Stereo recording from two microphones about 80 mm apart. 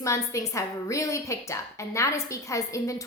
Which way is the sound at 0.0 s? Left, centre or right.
Left.